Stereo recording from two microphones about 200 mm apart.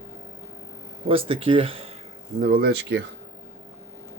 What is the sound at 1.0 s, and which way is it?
Speech, 25° right (ahead or behind).